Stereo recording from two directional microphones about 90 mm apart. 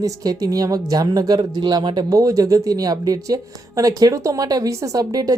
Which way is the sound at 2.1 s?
40° right (ahead or behind).